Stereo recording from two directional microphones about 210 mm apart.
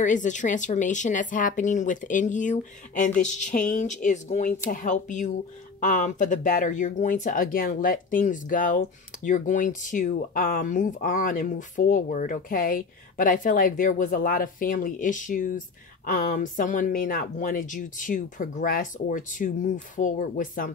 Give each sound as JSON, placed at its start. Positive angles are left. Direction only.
{"t": 0.0, "sound": "speech", "side_deg": 35}